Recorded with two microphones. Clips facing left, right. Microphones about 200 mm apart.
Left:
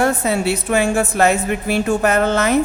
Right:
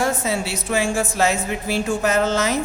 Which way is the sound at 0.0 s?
60° left (ahead or behind).